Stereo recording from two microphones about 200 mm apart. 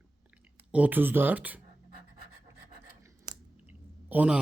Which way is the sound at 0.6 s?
5° right (ahead or behind).